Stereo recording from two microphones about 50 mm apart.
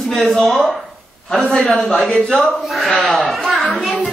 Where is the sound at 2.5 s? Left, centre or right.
Centre.